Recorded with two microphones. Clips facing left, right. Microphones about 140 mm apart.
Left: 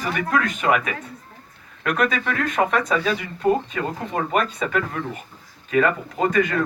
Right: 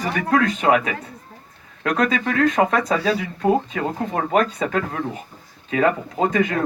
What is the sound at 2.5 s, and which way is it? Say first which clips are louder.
Speech: right 2 dB; 35° right (ahead or behind).